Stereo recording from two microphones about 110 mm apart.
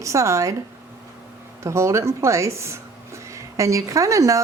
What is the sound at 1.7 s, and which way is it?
Speech, 25° right (ahead or behind).